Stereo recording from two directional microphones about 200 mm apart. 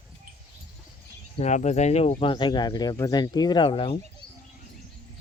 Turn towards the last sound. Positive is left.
turn(degrees=25)  # may be behind; listen again after turning